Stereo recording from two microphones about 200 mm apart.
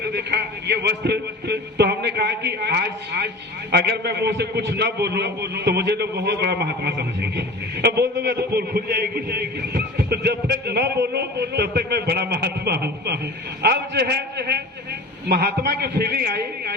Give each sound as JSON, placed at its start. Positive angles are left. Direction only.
{"t": 0.0, "sound": "a man's voice", "side_deg": -55}